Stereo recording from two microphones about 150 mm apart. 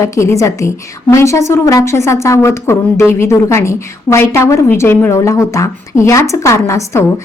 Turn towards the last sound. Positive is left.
turn(degrees=20)  # may be behind; listen again after turning